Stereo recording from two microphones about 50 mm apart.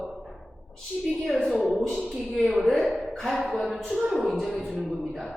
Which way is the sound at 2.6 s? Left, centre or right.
Centre.